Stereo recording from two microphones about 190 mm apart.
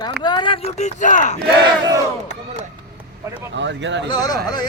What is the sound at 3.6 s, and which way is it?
Speech, 70° right (ahead or behind).